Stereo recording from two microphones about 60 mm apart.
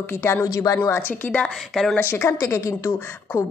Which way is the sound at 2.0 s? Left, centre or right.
Left.